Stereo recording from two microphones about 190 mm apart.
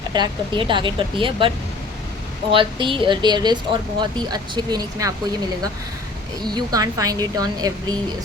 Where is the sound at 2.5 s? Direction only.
25° right (ahead or behind).